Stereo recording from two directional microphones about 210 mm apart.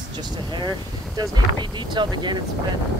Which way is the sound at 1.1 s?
20° right (ahead or behind).